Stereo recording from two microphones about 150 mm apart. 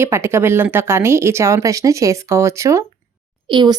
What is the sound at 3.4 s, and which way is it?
Speech, 30° right (ahead or behind).